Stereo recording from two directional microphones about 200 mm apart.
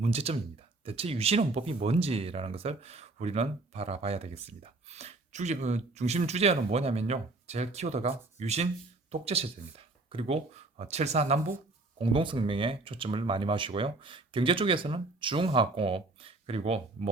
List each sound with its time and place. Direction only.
0.0 s speech: 30° right (ahead or behind)